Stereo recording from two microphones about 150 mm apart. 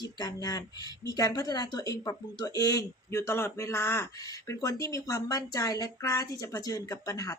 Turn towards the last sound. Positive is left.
turn(degrees=20)  # may be behind; listen again after turning